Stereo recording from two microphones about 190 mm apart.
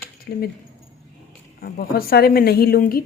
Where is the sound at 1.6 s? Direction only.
55° left (ahead or behind).